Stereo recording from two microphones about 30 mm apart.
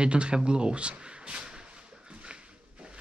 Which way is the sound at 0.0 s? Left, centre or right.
Right.